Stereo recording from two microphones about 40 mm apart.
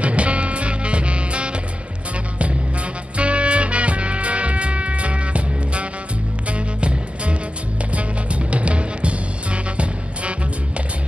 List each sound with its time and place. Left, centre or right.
0.0 s music: right
3.2 s music: right